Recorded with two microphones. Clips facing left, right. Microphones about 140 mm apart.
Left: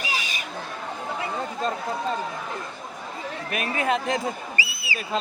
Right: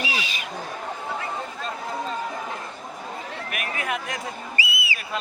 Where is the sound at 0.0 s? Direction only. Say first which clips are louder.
Right 1 dB; 45° left (ahead or behind).